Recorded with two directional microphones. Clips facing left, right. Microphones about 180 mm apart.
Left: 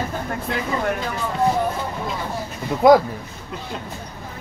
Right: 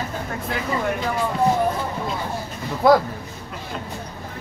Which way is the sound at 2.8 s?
15° left (ahead or behind).